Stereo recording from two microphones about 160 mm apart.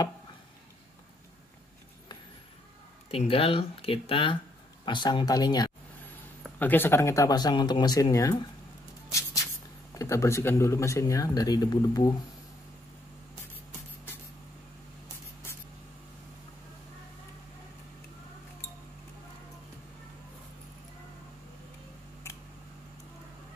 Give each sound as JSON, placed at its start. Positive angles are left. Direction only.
{"t": 3.1, "sound": "speech", "side_deg": 35}
{"t": 6.6, "sound": "speech", "side_deg": 10}
{"t": 9.9, "sound": "speech", "side_deg": 20}